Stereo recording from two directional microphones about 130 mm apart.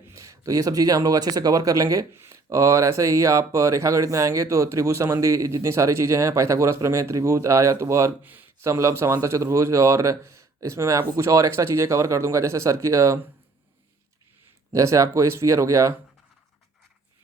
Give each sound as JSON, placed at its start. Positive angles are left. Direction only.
{"t": 0.0, "sound": "speech", "side_deg": -20}
{"t": 14.7, "sound": "speech", "side_deg": -25}